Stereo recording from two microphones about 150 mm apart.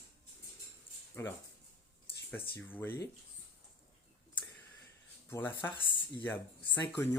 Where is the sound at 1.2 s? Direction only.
15° left (ahead or behind).